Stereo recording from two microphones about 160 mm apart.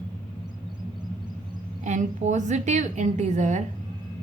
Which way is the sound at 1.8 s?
45° right (ahead or behind).